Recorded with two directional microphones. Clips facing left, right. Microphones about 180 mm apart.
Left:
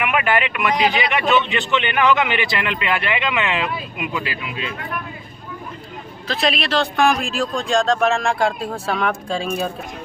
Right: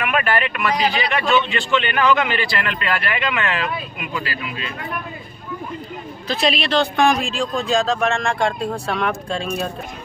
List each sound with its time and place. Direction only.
0.0 s a man's voice: 20° left (ahead or behind)
6.2 s a man's voice: centre (ahead or behind)